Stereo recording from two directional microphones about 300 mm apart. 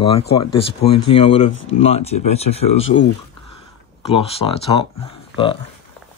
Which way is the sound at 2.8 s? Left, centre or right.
Left.